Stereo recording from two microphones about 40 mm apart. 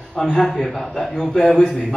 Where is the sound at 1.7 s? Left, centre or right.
Centre.